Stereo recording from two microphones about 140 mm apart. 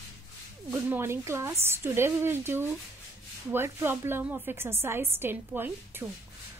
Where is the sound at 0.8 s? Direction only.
15° right (ahead or behind).